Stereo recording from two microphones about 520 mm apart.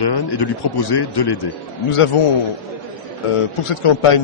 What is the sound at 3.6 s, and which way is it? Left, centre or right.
Speech, left.